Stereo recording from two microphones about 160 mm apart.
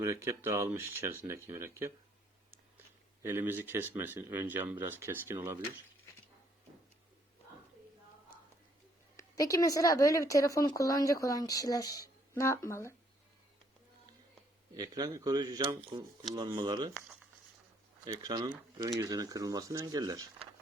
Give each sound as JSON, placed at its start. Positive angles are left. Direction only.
{"t": 0.0, "sound": "speech", "side_deg": -20}
{"t": 3.2, "sound": "speech", "side_deg": -15}
{"t": 9.1, "sound": "speech", "side_deg": 20}
{"t": 14.8, "sound": "speech", "side_deg": -25}
{"t": 18.0, "sound": "speech", "side_deg": -25}